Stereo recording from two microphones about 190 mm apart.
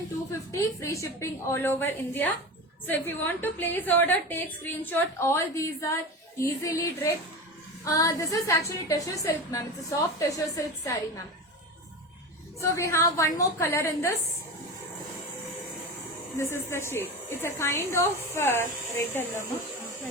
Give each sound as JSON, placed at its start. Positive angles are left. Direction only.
{"t": 0.3, "sound": "a woman's voice", "side_deg": 15}
{"t": 12.5, "sound": "a woman's voice", "side_deg": 15}
{"t": 16.4, "sound": "a woman's voice", "side_deg": 15}